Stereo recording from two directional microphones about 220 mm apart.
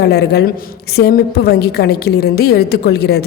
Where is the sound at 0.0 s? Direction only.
45° left (ahead or behind).